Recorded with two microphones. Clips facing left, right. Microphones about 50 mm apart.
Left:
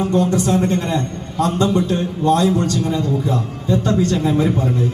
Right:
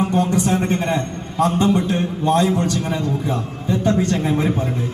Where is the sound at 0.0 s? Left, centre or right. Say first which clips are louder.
Left 1 dB; right.